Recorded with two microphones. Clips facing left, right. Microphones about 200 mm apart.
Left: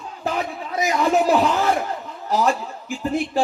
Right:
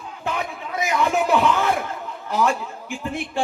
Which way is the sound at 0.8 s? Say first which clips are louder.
Left 3 dB; 35° left (ahead or behind).